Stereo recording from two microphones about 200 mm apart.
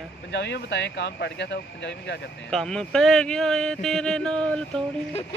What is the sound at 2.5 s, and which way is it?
Speech, 5° left (ahead or behind).